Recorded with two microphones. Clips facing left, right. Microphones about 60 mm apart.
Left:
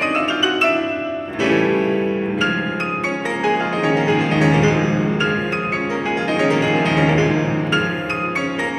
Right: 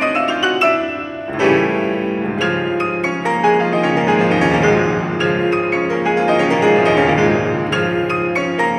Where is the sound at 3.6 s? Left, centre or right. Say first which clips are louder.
Right 5 dB; right.